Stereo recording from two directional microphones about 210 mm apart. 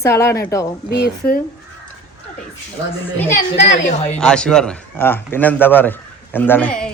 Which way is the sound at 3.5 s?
55° left (ahead or behind).